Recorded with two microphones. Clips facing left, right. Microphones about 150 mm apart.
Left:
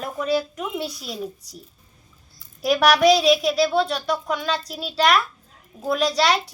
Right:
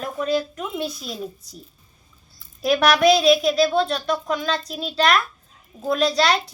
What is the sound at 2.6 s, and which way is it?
Speech, 10° left (ahead or behind).